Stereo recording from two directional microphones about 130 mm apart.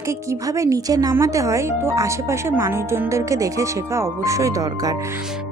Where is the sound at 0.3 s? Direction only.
25° right (ahead or behind).